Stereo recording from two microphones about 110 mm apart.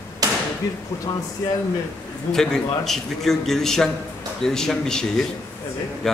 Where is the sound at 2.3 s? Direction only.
5° left (ahead or behind).